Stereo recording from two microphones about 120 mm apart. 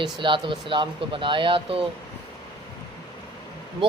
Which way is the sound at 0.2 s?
45° right (ahead or behind).